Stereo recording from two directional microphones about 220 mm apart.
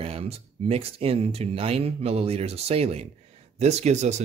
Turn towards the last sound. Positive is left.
turn(degrees=-30)  # may be behind; listen again after turning